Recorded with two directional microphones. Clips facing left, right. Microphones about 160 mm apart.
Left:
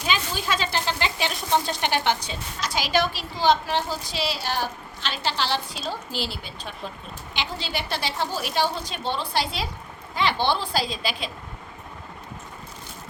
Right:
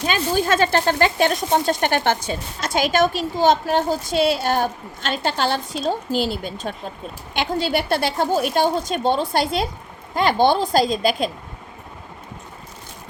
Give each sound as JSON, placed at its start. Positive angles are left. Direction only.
{"t": 0.0, "sound": "speech", "side_deg": -50}